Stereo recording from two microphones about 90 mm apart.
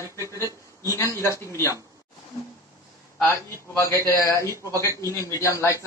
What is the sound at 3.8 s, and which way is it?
A man's voice, 35° left (ahead or behind).